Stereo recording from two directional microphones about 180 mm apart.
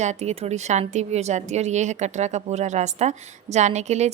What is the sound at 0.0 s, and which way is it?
A woman's voice, 40° right (ahead or behind).